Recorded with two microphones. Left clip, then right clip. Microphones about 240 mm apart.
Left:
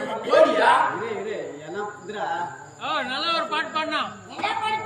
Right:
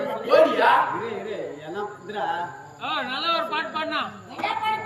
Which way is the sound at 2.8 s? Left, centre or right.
Left.